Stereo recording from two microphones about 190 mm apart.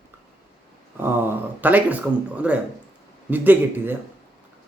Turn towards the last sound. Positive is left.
turn(degrees=-10)  # may be behind; listen again after turning